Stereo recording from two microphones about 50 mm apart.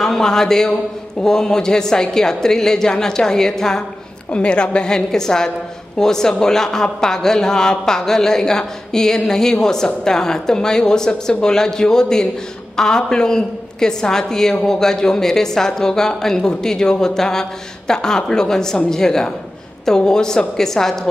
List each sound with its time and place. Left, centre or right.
0.0 s a man's voice: centre